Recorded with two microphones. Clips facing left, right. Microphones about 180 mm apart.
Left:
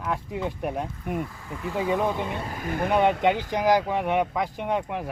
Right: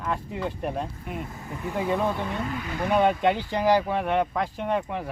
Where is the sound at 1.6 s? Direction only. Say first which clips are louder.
Left 1 dB; 15° right (ahead or behind).